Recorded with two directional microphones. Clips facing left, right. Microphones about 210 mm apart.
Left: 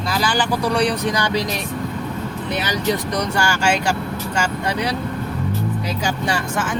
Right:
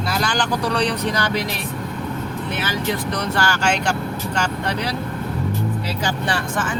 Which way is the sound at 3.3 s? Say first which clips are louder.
Left 1 dB; 10° left (ahead or behind).